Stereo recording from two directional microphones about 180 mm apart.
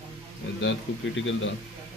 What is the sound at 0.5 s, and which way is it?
Speech, 90° left.